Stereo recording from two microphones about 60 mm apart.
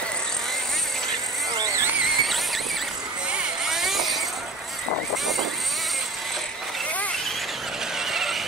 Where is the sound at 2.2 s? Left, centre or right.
Centre.